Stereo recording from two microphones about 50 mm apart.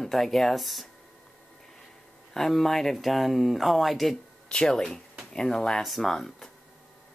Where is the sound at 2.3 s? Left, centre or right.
Centre.